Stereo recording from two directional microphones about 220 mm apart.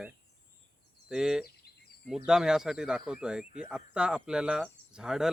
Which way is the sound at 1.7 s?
45° left (ahead or behind).